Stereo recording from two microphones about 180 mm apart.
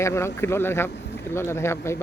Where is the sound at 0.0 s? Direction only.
15° left (ahead or behind).